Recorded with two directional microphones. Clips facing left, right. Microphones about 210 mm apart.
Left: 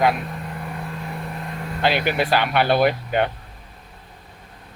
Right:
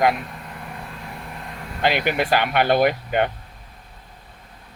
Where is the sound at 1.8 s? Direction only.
15° right (ahead or behind).